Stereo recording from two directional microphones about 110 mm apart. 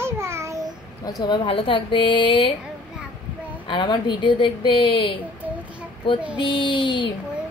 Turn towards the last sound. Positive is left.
turn(degrees=45)  # may be behind; listen again after turning